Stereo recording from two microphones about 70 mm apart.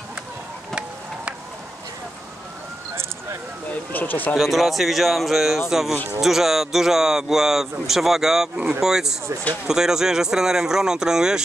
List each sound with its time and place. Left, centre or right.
3.9 s speech: left
4.4 s speech: centre